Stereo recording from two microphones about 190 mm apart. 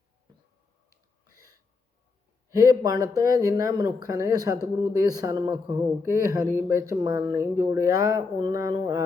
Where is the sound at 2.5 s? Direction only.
20° right (ahead or behind).